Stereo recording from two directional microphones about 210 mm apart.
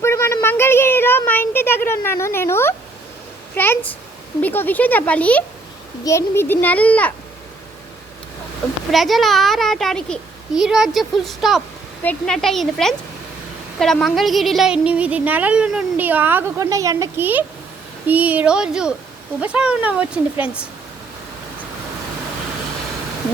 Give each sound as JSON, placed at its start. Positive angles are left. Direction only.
{"t": 0.0, "sound": "a sound", "side_deg": 15}
{"t": 4.4, "sound": "speech", "side_deg": 10}
{"t": 8.9, "sound": "a child's voice", "side_deg": 0}